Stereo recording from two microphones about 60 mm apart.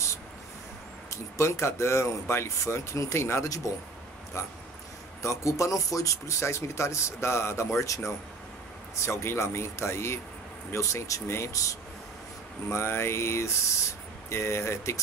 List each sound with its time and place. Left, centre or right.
1.1 s speech: left
3.6 s speech: left
4.4 s speech: left
6.4 s speech: left
7.8 s speech: left
8.9 s speech: left
12.6 s speech: left